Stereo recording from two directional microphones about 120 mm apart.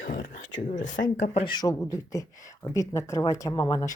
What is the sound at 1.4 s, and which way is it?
Speech, 35° left (ahead or behind).